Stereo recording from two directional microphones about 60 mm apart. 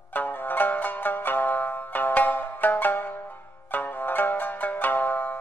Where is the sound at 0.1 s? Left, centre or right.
Left.